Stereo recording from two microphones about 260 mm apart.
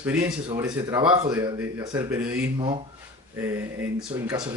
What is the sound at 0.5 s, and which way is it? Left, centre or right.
Mantra, centre.